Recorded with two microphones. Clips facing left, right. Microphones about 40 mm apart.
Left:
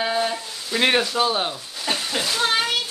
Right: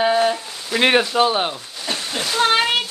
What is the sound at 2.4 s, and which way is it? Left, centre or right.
Speech, right.